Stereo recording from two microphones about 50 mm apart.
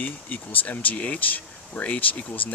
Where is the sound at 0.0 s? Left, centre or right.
Left.